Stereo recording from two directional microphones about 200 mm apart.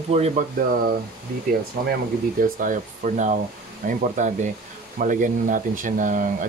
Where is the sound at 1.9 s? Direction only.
45° right (ahead or behind).